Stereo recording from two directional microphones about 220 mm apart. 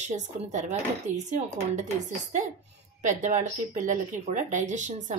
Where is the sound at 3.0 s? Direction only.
35° right (ahead or behind).